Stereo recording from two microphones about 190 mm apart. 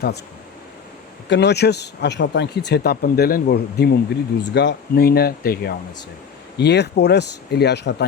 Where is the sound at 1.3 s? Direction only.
65° left (ahead or behind).